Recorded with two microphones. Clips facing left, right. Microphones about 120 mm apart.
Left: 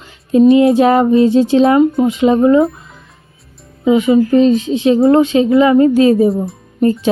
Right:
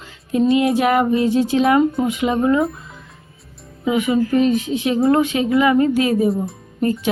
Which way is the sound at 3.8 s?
25° left (ahead or behind).